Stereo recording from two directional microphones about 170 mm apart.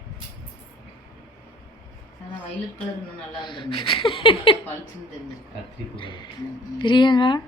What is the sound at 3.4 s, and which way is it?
Speech, 30° left (ahead or behind).